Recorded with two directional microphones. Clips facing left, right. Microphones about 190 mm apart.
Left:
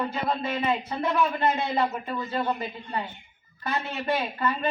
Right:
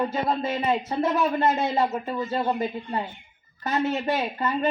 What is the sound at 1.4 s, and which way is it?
Speech, 40° right (ahead or behind).